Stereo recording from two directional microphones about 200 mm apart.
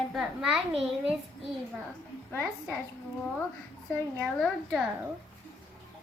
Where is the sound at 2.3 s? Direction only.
5° left (ahead or behind).